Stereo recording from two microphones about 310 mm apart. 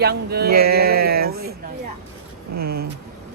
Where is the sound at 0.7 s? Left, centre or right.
Right.